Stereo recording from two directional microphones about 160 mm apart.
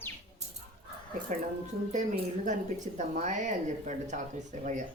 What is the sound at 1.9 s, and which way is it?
Speech, 50° right (ahead or behind).